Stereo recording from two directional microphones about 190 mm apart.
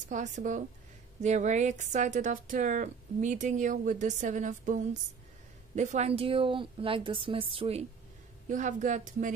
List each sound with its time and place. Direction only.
0.1 s a woman's voice: 40° right (ahead or behind)
8.5 s a woman's voice: 40° right (ahead or behind)